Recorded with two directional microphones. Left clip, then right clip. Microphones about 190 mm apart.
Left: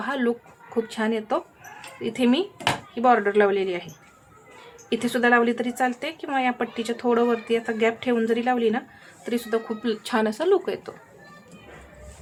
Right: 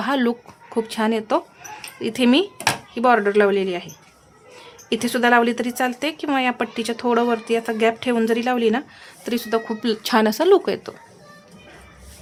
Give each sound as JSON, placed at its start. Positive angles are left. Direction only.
{"t": 0.0, "sound": "a woman's voice", "side_deg": -35}
{"t": 4.9, "sound": "a woman's voice", "side_deg": -30}